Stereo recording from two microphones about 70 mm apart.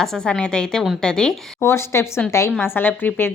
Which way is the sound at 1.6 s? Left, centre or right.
Left.